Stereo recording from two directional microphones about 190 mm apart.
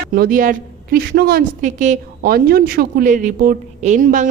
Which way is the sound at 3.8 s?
40° right (ahead or behind).